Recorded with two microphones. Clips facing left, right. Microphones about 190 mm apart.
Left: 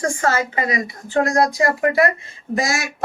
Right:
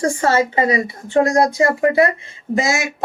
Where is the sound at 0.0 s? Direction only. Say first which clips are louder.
Right 4 dB; 30° right (ahead or behind).